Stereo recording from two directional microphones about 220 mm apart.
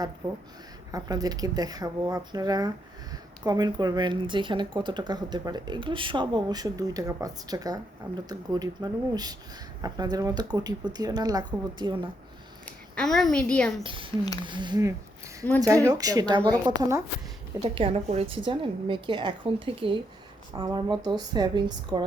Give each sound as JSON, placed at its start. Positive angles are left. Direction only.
{"t": 0.9, "sound": "a woman's voice", "side_deg": -15}
{"t": 12.6, "sound": "a woman's voice", "side_deg": 5}
{"t": 13.8, "sound": "a woman's voice", "side_deg": -20}
{"t": 17.6, "sound": "a woman's voice", "side_deg": -25}